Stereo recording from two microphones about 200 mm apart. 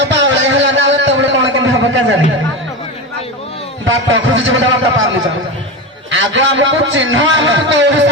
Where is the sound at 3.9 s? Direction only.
70° right (ahead or behind).